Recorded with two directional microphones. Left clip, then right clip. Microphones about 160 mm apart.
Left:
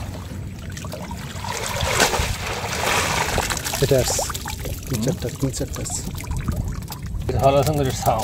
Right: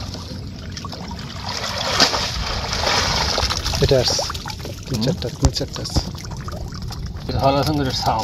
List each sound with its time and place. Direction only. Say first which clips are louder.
1.5 s boat: right 1 dB; 30° left (ahead or behind)
3.3 s a sound: right 2 dB; 10° left (ahead or behind)
3.7 s pour: right 2 dB; 5° left (ahead or behind)
5.0 s speech: right 3 dB; 10° left (ahead or behind)
7.3 s speech: left 1 dB; 30° left (ahead or behind)